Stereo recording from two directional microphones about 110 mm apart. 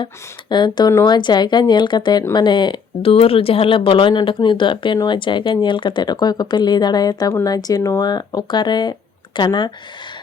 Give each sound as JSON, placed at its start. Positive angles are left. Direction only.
{"t": 0.5, "sound": "speech", "side_deg": 40}
{"t": 3.1, "sound": "speech", "side_deg": 60}